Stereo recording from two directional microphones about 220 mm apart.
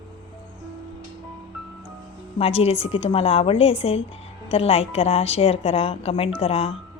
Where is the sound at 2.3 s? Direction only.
25° left (ahead or behind).